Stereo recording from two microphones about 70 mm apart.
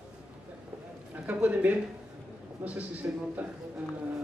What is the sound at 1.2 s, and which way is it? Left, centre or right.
A man's voice, right.